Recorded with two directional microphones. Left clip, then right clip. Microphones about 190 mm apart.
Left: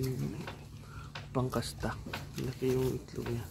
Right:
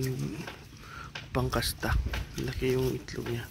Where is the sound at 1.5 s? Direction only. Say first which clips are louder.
Right 6 dB; 15° right (ahead or behind).